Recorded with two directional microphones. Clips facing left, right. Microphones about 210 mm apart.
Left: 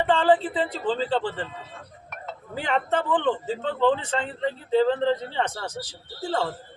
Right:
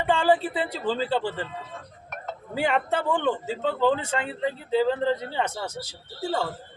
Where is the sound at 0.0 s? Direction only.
10° right (ahead or behind).